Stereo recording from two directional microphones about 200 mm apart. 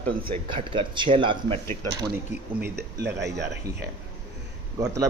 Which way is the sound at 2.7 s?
55° right (ahead or behind).